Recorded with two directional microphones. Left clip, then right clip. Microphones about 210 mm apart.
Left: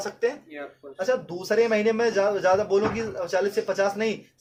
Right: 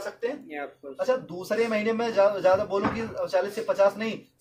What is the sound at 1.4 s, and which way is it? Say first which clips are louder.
A man's voice: left 5 dB; 50° left (ahead or behind).